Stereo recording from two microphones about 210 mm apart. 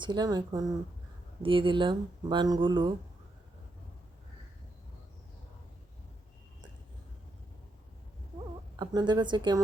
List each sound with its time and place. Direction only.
0.0 s speech: 20° right (ahead or behind)
8.7 s speech: 20° right (ahead or behind)